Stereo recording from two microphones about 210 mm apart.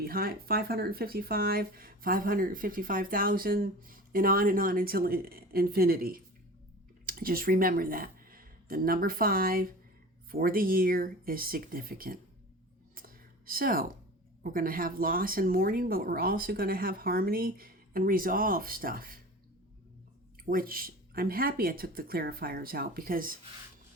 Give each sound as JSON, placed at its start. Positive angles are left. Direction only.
{"t": 0.0, "sound": "speech", "side_deg": -45}
{"t": 12.9, "sound": "a sound", "side_deg": -45}
{"t": 14.4, "sound": "speech", "side_deg": -45}
{"t": 20.4, "sound": "speech", "side_deg": -45}